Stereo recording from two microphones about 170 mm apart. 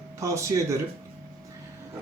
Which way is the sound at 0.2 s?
15° right (ahead or behind).